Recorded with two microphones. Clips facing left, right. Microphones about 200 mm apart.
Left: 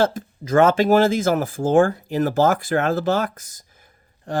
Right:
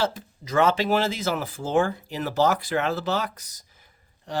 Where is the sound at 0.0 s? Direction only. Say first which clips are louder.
Left 6 dB; 50° left (ahead or behind).